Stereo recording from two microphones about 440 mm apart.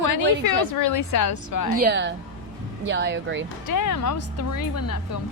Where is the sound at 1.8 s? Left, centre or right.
Right.